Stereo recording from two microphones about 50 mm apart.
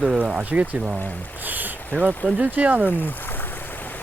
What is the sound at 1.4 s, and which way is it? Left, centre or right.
Speech, right.